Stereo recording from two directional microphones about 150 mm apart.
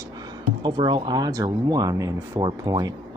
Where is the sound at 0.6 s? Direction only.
30° right (ahead or behind).